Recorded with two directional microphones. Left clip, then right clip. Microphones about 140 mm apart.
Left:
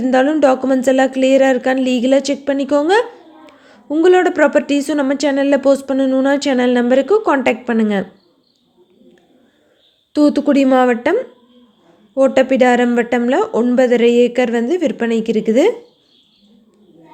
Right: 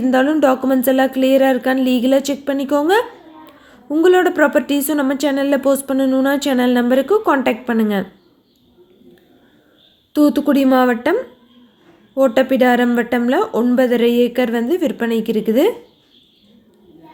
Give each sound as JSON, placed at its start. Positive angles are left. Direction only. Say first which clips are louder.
{"t": 0.0, "sound": "speech", "louder": "left 2 dB", "side_deg": 15}
{"t": 10.1, "sound": "speech", "louder": "left 1 dB", "side_deg": 15}